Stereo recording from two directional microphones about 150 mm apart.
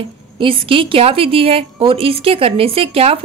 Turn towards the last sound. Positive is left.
turn(degrees=-40)  # may be behind; listen again after turning